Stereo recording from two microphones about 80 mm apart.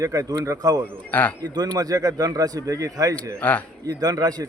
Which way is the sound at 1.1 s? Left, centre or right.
Centre.